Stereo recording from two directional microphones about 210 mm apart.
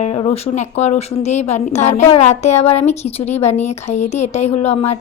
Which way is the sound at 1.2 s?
30° left (ahead or behind).